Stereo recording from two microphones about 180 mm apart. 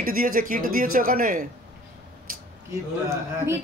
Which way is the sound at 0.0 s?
50° right (ahead or behind).